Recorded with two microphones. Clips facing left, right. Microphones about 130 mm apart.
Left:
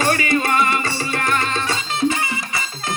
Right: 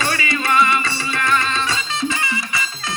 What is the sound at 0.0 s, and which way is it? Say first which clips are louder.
Music: left 4 dB; 50° left (ahead or behind).